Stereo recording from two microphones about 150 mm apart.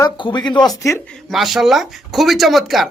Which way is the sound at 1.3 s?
Centre (ahead or behind).